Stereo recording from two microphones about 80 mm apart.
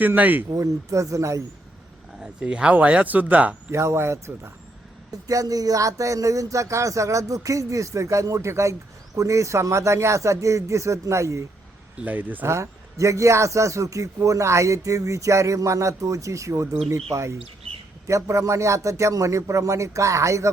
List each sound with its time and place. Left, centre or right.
0.0 s speech: right
0.5 s a man's voice: right
2.2 s speech: centre
3.7 s a man's voice: right
5.3 s a man's voice: right
11.9 s speech: right
12.5 s a man's voice: right